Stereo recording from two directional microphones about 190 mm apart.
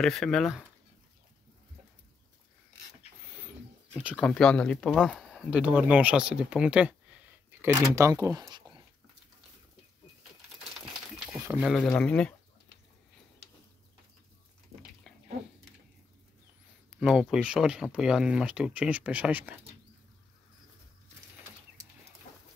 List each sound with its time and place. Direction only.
0.0 s speech: centre (ahead or behind)
4.2 s speech: 5° left (ahead or behind); by 8.8 s 20° right (ahead or behind)
11.4 s speech: 10° right (ahead or behind)
11.7 s speech: 5° left (ahead or behind)
17.0 s speech: 5° right (ahead or behind)